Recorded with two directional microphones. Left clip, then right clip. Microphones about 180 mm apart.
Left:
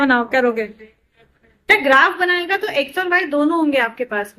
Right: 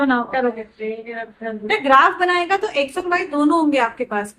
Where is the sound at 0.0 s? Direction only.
15° left (ahead or behind).